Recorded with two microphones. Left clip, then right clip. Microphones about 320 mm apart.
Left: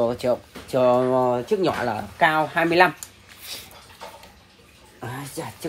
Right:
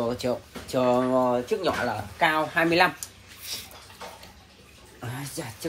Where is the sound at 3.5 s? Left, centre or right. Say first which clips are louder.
Even; left.